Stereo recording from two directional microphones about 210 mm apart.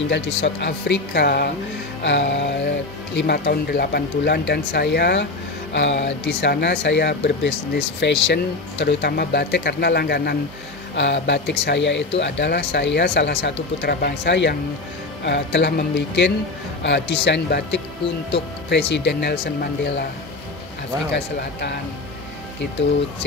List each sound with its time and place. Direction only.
0.1 s speech: 55° left (ahead or behind)
16.8 s speech: 55° left (ahead or behind)
21.1 s speech: 55° left (ahead or behind)